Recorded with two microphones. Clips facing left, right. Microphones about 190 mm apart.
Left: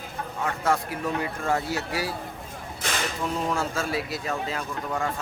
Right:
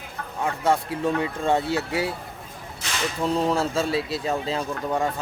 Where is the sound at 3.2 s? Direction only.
30° right (ahead or behind).